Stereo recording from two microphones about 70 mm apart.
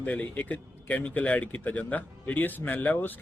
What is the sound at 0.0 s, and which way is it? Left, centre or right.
Speech, left.